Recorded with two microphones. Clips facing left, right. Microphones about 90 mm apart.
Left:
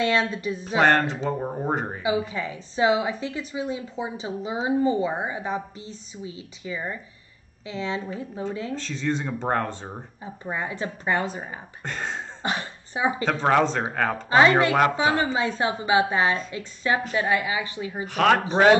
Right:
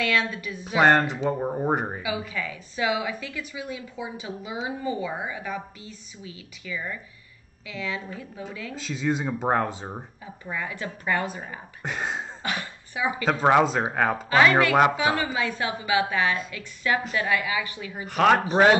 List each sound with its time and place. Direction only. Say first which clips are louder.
0.0 s a woman's voice: left 3 dB; 30° left (ahead or behind)
0.7 s speech: right 1 dB; 5° right (ahead or behind)
2.0 s a woman's voice: left 5 dB; 30° left (ahead or behind)
8.7 s speech: right 5 dB; 5° right (ahead or behind)
10.2 s a woman's voice: left 3 dB; 30° left (ahead or behind)
11.8 s speech: right 2 dB; 10° right (ahead or behind)
12.4 s throat clearing: left 5 dB; 30° left (ahead or behind)
13.2 s speech: right 2 dB; 10° right (ahead or behind)
15.0 s a woman's voice: left 2 dB; 30° left (ahead or behind)
18.0 s speech: even; 5° right (ahead or behind)